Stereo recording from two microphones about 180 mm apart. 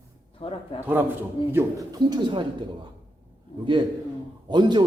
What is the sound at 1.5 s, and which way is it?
Speech, 20° right (ahead or behind).